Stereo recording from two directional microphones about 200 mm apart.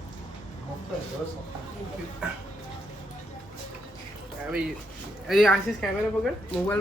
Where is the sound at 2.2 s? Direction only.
5° right (ahead or behind).